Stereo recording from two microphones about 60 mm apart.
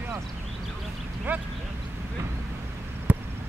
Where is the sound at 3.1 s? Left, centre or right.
Right.